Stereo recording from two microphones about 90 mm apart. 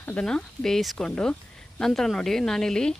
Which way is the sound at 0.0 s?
20° left (ahead or behind).